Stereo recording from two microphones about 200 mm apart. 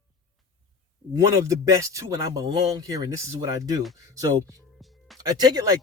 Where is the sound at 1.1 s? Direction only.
15° right (ahead or behind).